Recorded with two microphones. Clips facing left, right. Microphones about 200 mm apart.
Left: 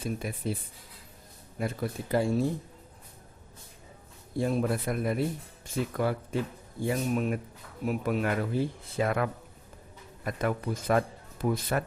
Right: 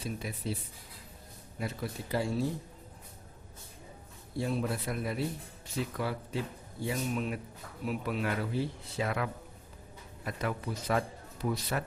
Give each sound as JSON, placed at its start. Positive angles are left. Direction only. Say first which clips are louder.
{"t": 0.0, "sound": "a man's voice", "louder": "left 4 dB", "side_deg": 50}
{"t": 1.5, "sound": "a man's voice", "louder": "left 5 dB", "side_deg": 50}
{"t": 4.4, "sound": "a man's voice", "louder": "left 5 dB", "side_deg": 50}